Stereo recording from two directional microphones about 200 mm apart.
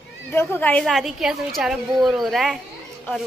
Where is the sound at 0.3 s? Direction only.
10° left (ahead or behind).